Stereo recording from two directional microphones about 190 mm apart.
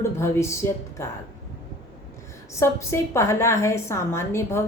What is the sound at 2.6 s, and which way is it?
A woman's voice, 15° left (ahead or behind).